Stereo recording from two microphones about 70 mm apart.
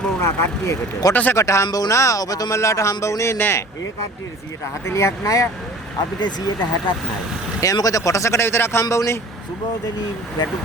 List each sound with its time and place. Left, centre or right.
0.2 s speech: left
1.1 s speech: left
1.4 s speech: left
1.6 s speech: left
1.9 s speech: left
3.3 s speech: left
4.9 s speech: left
6.1 s speech: left
7.6 s speech: left